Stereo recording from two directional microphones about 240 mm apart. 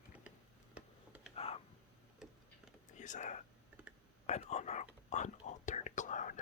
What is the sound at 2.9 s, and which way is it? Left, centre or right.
Whispering, left.